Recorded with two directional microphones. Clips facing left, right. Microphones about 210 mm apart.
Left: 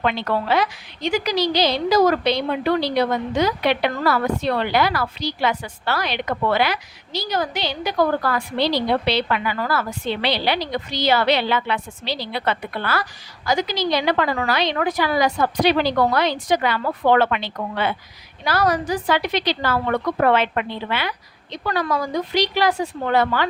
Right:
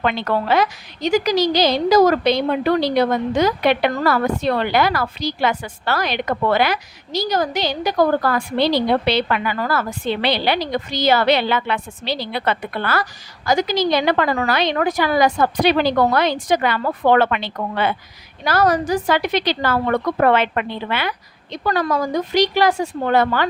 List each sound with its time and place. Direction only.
0.0 s a woman's voice: 55° right (ahead or behind)